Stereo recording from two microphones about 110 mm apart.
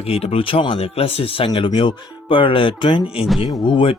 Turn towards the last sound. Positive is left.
turn(degrees=50)  # may be behind; listen again after turning